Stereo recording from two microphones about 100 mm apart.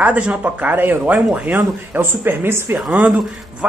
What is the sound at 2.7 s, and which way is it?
Speech, 5° right (ahead or behind).